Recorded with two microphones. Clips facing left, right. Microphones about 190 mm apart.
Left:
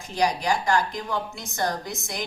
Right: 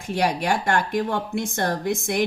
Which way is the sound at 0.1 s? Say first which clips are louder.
Right 2 dB; 60° right (ahead or behind).